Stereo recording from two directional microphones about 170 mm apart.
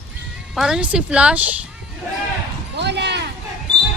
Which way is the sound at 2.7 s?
80° right.